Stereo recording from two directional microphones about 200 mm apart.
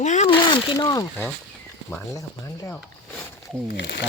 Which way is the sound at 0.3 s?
20° left (ahead or behind).